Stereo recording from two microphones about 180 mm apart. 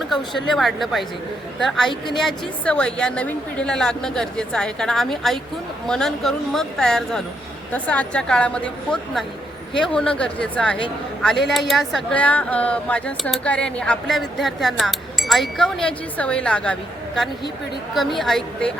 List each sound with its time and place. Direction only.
0.1 s a woman's voice: centre (ahead or behind)
17.9 s speech: centre (ahead or behind)